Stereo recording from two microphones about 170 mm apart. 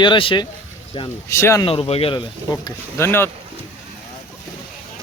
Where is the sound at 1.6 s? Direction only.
35° left (ahead or behind); by 3.2 s 15° left (ahead or behind).